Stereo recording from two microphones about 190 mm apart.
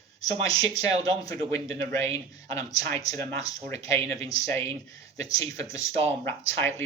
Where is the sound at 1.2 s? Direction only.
15° left (ahead or behind).